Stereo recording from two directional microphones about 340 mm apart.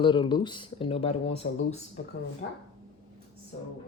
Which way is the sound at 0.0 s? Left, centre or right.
Centre.